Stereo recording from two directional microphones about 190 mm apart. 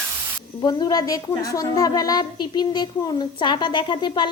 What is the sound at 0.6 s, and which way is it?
A woman's voice, 20° left (ahead or behind).